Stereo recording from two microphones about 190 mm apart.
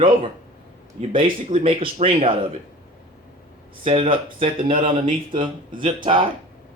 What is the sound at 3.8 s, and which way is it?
Speech, 30° right (ahead or behind).